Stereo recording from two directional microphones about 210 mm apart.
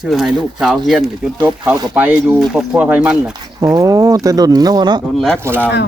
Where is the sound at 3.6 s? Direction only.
15° right (ahead or behind).